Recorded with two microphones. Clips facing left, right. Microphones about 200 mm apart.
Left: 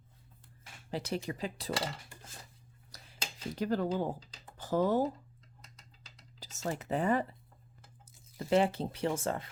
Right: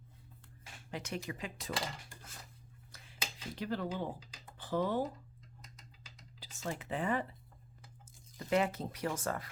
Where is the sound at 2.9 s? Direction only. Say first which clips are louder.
Left 4 dB; 40° left (ahead or behind).